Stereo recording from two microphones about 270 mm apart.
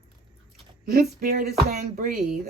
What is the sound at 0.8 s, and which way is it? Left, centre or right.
Speech, right.